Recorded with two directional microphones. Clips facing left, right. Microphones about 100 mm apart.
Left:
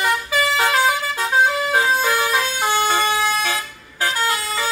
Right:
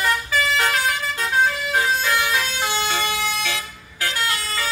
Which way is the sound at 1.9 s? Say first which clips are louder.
Left 3 dB; 40° left (ahead or behind).